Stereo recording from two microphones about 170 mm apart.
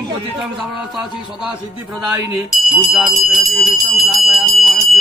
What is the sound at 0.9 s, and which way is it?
A man's voice, 5° right (ahead or behind).